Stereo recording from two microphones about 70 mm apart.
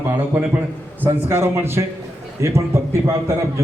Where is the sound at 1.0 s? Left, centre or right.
Right.